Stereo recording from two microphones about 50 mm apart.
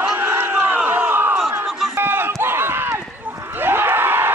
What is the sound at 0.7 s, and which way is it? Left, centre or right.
Crowd, right.